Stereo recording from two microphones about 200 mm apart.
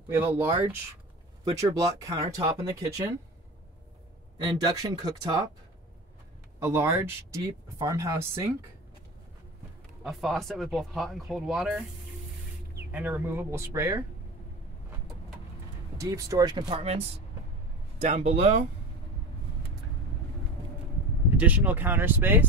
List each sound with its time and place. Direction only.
0.2 s speech: 10° right (ahead or behind)
4.5 s speech: 20° right (ahead or behind)
6.6 s speech: 10° right (ahead or behind)
10.0 s speech: centre (ahead or behind)
12.9 s speech: 10° right (ahead or behind)
16.0 s speech: 15° right (ahead or behind)
18.0 s speech: 35° right (ahead or behind)
21.4 s speech: 10° right (ahead or behind)